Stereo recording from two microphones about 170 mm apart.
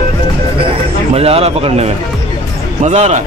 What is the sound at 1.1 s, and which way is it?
A man's voice, 35° right (ahead or behind).